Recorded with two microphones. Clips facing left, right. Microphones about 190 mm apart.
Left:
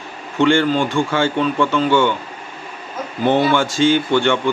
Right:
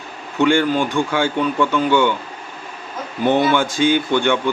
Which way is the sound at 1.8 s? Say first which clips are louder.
Left 1 dB; 15° right (ahead or behind).